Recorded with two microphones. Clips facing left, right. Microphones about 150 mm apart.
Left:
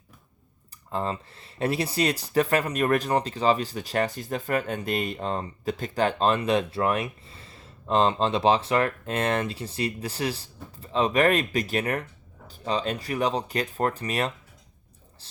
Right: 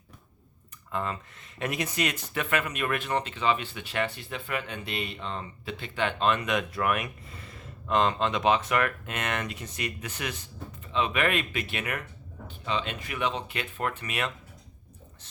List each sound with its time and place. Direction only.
0.9 s speech: 30° left (ahead or behind)